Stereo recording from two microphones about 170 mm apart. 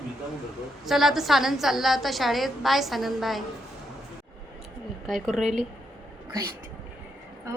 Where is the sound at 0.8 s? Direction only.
Centre (ahead or behind).